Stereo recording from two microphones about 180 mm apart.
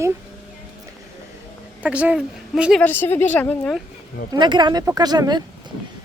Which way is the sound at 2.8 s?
10° left (ahead or behind).